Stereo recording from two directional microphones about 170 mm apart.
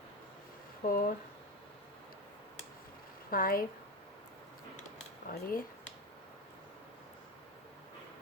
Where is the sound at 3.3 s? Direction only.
60° left (ahead or behind).